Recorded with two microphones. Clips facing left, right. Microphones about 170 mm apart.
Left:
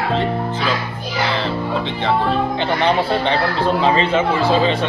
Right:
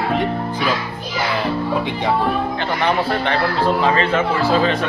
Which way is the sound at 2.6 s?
20° left (ahead or behind).